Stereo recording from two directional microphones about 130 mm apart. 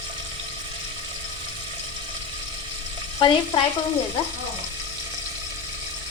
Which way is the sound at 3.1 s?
40° left (ahead or behind).